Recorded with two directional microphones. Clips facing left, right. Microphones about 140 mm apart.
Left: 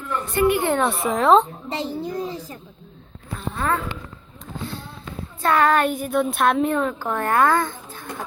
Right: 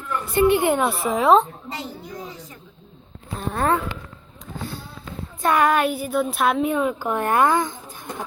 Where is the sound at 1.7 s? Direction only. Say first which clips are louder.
Left 7 dB; 25° left (ahead or behind).